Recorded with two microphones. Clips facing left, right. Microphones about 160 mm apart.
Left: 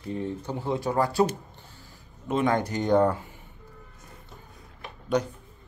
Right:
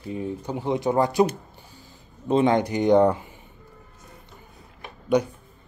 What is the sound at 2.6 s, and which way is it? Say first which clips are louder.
Speech: right 4 dB; 15° right (ahead or behind).